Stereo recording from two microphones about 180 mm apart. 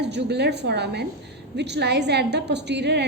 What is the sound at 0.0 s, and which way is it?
A woman's voice, 70° right (ahead or behind).